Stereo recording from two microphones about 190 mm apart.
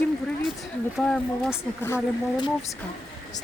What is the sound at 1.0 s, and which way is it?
Speech, centre (ahead or behind).